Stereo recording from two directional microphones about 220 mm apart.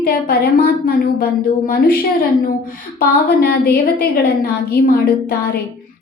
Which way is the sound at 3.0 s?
45° left (ahead or behind).